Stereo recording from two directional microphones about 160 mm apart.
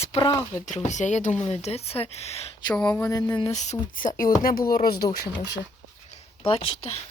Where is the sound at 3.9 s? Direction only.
60° left (ahead or behind); by 5.2 s 75° left (ahead or behind).